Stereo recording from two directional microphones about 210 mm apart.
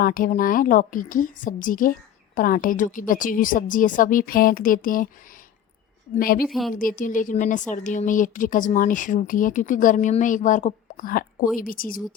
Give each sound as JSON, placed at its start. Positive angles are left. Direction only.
{"t": 0.0, "sound": "a woman's voice", "side_deg": 45}
{"t": 6.1, "sound": "a woman's voice", "side_deg": 45}
{"t": 6.5, "sound": "a woman's voice", "side_deg": 0}
{"t": 6.7, "sound": "a woman's voice", "side_deg": 40}